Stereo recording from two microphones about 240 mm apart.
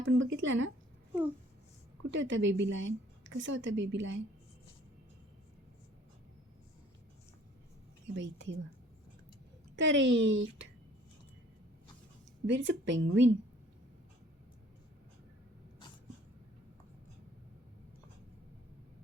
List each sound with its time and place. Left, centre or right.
0.0 s a sound: right
2.0 s a woman's voice: right
8.1 s a woman's voice: right
9.7 s a woman's voice: right
12.5 s a woman's voice: right